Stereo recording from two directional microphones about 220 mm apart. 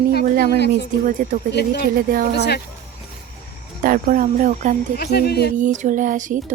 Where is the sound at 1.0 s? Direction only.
40° right (ahead or behind).